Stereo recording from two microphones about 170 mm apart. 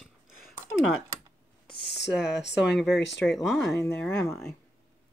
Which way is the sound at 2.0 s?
Centre (ahead or behind).